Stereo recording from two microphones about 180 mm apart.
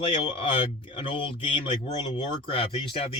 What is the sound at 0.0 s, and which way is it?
Speech, 30° left (ahead or behind).